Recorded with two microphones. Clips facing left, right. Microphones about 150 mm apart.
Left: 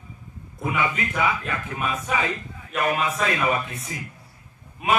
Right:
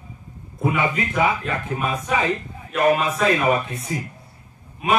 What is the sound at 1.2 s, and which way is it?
Speech, 35° right (ahead or behind).